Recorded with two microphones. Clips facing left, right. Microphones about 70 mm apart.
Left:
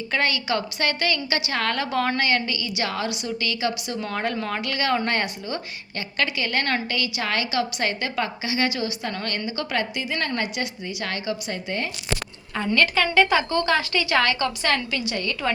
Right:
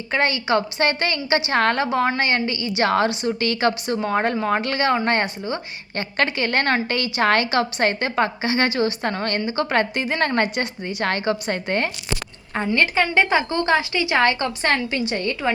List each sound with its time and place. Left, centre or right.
0.1 s a woman's voice: right
12.5 s a woman's voice: right